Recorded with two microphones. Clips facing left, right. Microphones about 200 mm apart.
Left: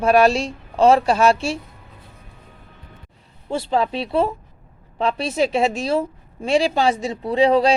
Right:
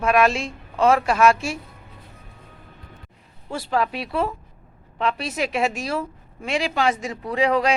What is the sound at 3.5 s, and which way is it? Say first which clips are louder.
A woman's voice: left 3 dB; 25° left (ahead or behind).